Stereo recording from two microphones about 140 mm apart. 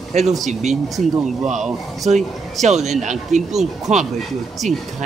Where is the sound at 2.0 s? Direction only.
55° right (ahead or behind).